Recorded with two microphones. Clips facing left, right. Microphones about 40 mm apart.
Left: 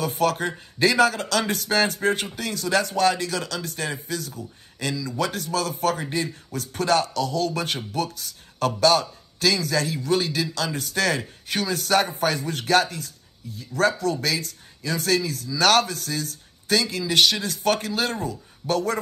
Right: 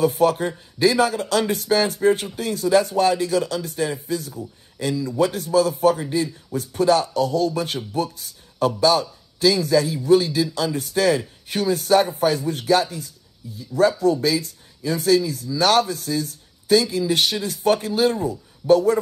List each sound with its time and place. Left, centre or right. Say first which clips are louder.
0.0 s speech: right 5 dB; left